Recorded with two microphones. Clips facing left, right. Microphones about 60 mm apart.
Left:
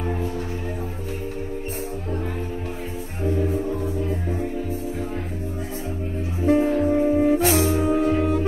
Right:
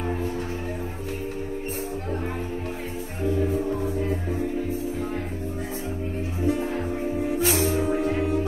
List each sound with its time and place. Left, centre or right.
6.4 s music: left
7.3 s music: left
7.7 s music: left